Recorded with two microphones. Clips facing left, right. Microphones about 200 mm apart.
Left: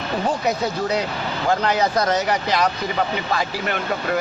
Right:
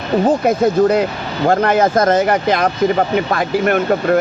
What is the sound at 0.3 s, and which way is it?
Speech, 50° right (ahead or behind).